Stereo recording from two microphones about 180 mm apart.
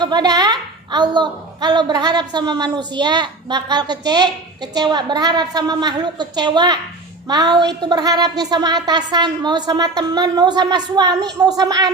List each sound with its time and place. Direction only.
0.0 s a woman's voice: 25° right (ahead or behind)